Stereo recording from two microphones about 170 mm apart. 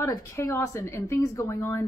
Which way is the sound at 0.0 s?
15° left (ahead or behind).